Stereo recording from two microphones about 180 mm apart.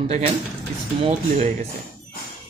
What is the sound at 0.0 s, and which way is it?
Speech, 35° right (ahead or behind).